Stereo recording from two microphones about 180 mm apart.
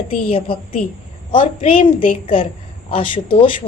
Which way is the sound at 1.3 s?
30° left (ahead or behind).